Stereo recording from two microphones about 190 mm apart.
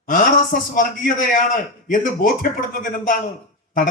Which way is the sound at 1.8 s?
45° left (ahead or behind).